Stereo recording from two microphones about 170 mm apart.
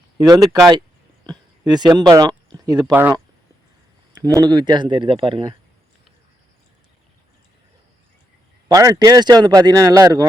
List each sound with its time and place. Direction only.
0.2 s speech: 20° right (ahead or behind)
2.9 s speech: 10° right (ahead or behind)
4.4 s speech: 25° right (ahead or behind)
8.7 s speech: 20° right (ahead or behind)